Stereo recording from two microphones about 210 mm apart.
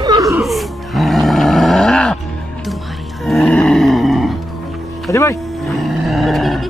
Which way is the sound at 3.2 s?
Centre (ahead or behind).